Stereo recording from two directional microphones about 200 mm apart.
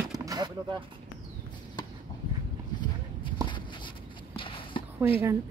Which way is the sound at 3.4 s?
25° left (ahead or behind).